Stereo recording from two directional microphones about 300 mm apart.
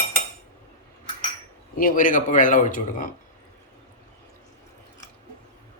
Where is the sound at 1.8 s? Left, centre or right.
Left.